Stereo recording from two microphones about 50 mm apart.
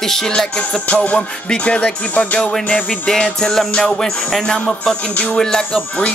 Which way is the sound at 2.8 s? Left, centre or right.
Centre.